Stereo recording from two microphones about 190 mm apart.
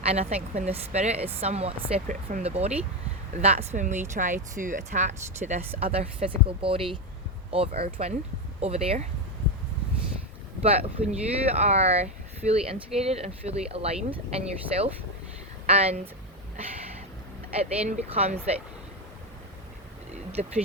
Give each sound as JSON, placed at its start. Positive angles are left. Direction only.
{"t": 0.0, "sound": "speech", "side_deg": -35}
{"t": 10.6, "sound": "speech", "side_deg": -30}
{"t": 17.5, "sound": "speech", "side_deg": -35}
{"t": 20.4, "sound": "speech", "side_deg": -40}